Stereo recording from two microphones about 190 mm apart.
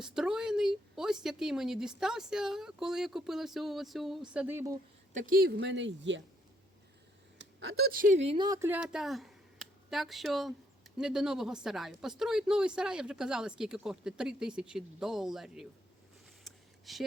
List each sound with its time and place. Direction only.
0.0 s a woman's voice: 5° right (ahead or behind)
5.1 s speech: 45° right (ahead or behind)
5.5 s speech: 70° right (ahead or behind)
7.3 s speech: 70° right (ahead or behind); by 8.4 s 30° right (ahead or behind)
8.4 s a woman's voice: 15° right (ahead or behind)
16.4 s a sound: centre (ahead or behind)